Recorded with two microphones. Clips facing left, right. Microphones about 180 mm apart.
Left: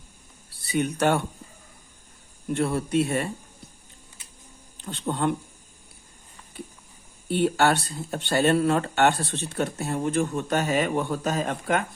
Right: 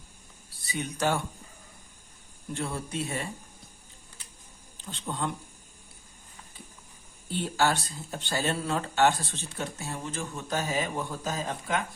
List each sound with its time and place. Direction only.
0.6 s speech: 60° left (ahead or behind)
2.5 s speech: 60° left (ahead or behind)
4.8 s speech: 60° left (ahead or behind)
7.3 s speech: 60° left (ahead or behind)